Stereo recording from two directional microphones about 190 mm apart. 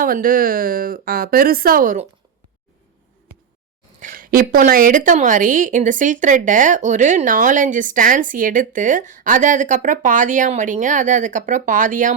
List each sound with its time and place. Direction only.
0.0 s a woman's voice: 50° right (ahead or behind)
4.0 s a woman's voice: 50° right (ahead or behind)